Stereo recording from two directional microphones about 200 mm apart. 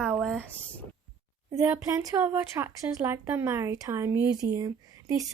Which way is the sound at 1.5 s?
15° right (ahead or behind).